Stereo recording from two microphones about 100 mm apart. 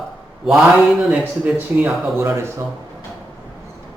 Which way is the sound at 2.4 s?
25° right (ahead or behind).